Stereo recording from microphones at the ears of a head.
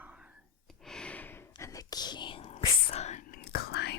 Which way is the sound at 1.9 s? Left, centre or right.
Left.